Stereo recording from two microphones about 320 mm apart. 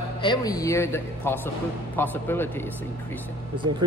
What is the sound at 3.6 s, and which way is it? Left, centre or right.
Speech, centre.